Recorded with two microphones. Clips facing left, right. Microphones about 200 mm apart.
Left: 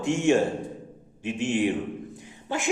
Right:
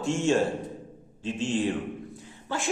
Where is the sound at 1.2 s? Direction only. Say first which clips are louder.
Left 2 dB; 15° left (ahead or behind).